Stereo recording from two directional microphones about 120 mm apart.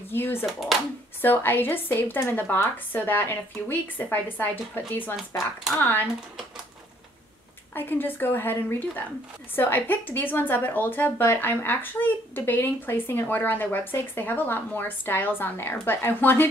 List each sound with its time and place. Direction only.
0.1 s speech: 20° left (ahead or behind)
0.5 s speech: centre (ahead or behind)
1.2 s a woman's voice: 15° left (ahead or behind)
7.7 s a woman's voice: 15° left (ahead or behind)